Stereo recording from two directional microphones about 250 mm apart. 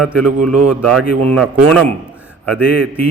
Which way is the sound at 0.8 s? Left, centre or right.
Right.